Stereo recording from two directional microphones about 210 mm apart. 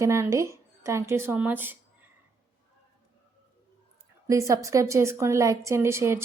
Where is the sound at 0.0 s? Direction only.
15° right (ahead or behind).